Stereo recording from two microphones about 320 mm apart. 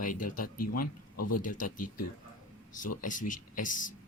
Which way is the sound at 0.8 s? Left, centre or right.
Left.